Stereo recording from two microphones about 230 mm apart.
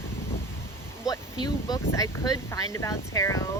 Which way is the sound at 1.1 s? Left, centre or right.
Centre.